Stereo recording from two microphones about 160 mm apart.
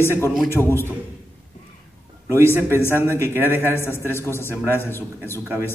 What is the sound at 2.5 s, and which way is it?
Speech, 15° right (ahead or behind).